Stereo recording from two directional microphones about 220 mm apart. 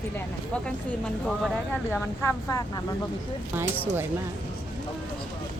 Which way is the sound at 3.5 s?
10° right (ahead or behind).